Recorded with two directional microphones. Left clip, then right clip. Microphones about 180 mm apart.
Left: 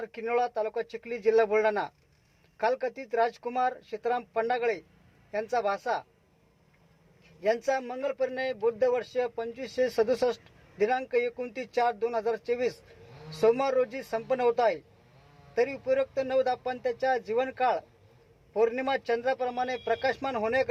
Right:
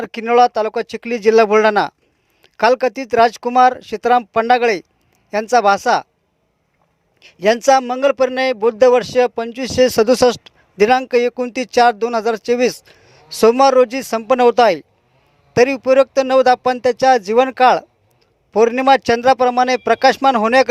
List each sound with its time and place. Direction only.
0.0 s a man's voice: 45° right (ahead or behind)
7.2 s a man's voice: 45° right (ahead or behind)